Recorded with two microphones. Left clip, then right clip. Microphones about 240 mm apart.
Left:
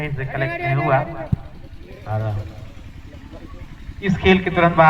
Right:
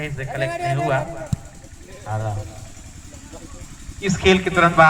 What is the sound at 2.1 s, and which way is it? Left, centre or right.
Speech, right.